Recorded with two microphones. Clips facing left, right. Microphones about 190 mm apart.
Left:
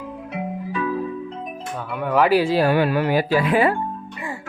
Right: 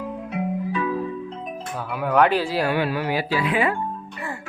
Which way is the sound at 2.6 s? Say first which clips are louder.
Left 4 dB; 40° left (ahead or behind).